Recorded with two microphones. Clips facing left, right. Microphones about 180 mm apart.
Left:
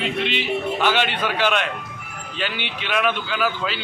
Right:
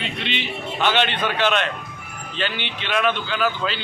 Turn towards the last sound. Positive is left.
turn(degrees=10)  # may be behind; listen again after turning